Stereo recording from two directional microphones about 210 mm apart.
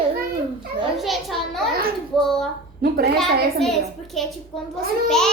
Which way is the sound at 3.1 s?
Centre (ahead or behind).